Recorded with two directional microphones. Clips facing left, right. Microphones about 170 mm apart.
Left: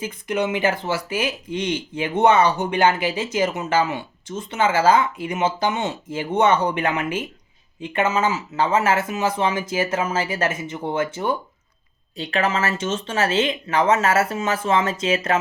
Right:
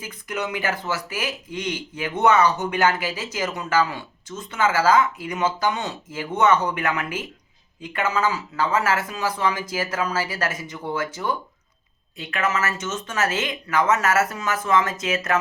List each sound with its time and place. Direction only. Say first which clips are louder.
0.0 s speech: left 6 dB; 30° left (ahead or behind)